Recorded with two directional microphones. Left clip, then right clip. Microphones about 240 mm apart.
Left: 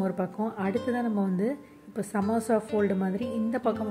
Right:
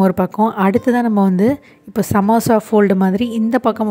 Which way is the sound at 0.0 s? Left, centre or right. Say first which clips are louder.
Right 15 dB; right.